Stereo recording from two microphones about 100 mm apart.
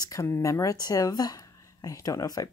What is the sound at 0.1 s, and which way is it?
Speech, 30° left (ahead or behind).